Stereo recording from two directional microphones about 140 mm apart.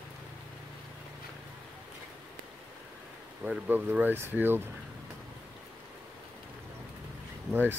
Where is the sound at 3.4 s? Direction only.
10° right (ahead or behind).